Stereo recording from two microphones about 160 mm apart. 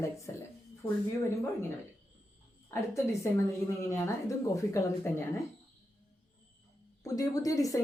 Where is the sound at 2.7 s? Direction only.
20° left (ahead or behind).